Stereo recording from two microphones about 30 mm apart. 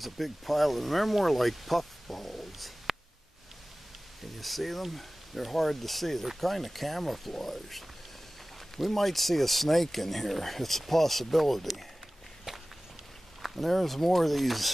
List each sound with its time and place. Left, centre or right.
0.0 s speech: centre
4.4 s speech: centre
12.5 s walk: centre
13.4 s speech: centre